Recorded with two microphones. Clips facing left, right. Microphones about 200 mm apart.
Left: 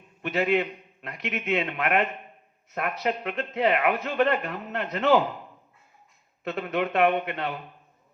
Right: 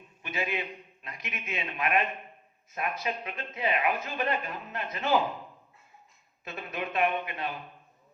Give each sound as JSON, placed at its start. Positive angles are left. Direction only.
{"t": 0.2, "sound": "speech", "side_deg": 70}
{"t": 6.4, "sound": "speech", "side_deg": 65}